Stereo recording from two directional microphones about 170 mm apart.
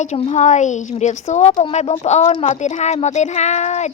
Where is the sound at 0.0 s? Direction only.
40° left (ahead or behind).